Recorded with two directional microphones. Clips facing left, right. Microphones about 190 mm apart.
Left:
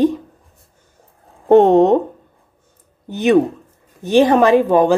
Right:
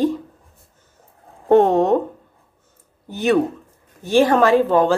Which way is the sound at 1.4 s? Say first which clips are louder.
Left 4 dB; 20° left (ahead or behind).